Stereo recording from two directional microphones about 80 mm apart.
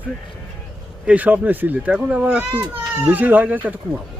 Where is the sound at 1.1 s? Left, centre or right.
Centre.